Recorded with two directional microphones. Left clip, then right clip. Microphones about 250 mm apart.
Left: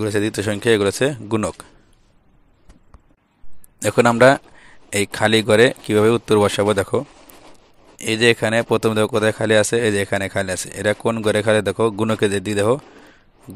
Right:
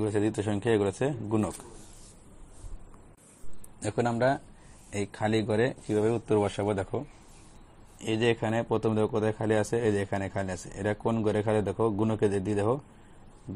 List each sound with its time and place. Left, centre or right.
0.0 s speech: left
4.0 s speech: left